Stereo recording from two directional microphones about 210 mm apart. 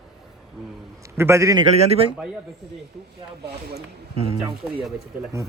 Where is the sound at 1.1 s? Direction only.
15° right (ahead or behind).